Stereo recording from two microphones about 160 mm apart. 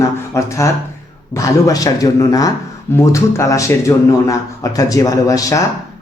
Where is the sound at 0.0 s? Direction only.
20° left (ahead or behind).